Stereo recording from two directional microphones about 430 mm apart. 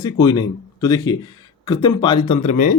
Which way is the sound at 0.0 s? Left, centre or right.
Centre.